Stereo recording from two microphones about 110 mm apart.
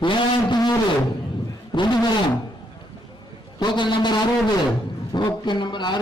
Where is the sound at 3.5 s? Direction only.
45° left (ahead or behind).